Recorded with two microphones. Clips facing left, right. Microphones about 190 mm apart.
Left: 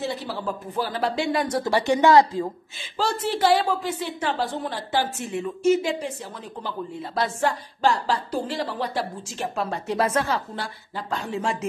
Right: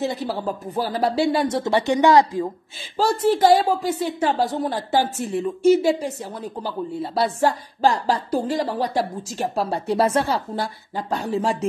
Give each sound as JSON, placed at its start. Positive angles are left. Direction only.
{"t": 0.0, "sound": "speech", "side_deg": -45}
{"t": 3.0, "sound": "speech", "side_deg": -40}